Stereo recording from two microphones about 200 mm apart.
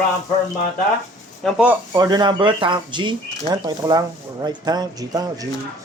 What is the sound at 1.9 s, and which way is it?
Speech, 20° right (ahead or behind).